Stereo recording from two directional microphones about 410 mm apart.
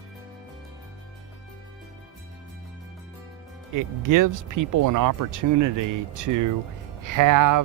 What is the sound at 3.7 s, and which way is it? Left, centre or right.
Speech, right.